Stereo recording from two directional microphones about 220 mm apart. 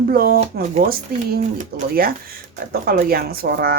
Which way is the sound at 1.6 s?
40° right (ahead or behind).